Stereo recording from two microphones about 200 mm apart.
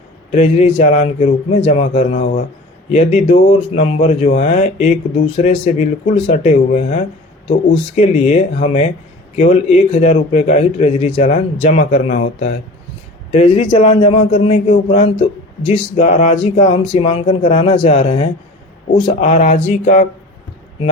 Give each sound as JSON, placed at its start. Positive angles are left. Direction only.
{"t": 0.3, "sound": "speech", "side_deg": 30}